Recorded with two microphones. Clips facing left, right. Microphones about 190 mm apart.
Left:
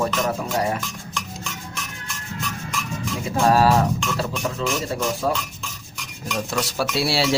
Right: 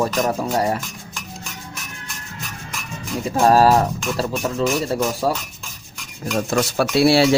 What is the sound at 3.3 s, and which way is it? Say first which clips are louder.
Speech: right 3 dB; 40° right (ahead or behind).